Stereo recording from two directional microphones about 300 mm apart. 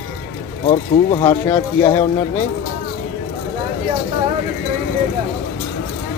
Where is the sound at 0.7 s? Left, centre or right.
Centre.